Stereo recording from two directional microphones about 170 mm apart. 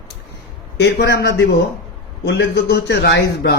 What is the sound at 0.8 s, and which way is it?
A man's voice, 85° left.